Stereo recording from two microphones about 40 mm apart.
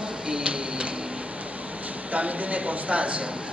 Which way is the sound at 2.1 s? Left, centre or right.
Right.